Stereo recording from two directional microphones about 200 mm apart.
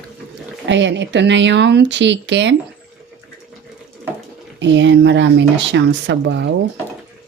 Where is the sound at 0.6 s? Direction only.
65° right (ahead or behind).